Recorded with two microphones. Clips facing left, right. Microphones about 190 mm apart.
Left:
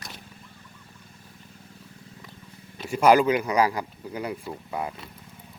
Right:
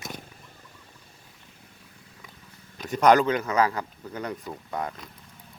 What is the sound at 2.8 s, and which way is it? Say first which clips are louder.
Speech: left 1 dB; 5° left (ahead or behind).